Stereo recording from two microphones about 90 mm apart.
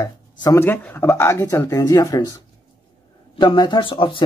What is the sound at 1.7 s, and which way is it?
Speech, 35° left (ahead or behind).